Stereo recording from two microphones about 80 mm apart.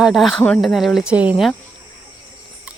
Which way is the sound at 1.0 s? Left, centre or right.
Centre.